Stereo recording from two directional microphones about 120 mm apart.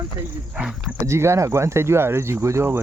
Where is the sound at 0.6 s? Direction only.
10° right (ahead or behind).